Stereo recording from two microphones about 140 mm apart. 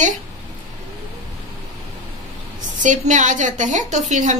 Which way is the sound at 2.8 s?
60° right (ahead or behind).